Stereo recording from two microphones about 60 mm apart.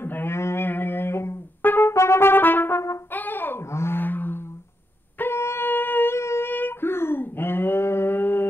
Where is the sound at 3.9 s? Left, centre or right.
Left.